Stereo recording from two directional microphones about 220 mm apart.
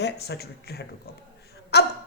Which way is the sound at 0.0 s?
50° left (ahead or behind).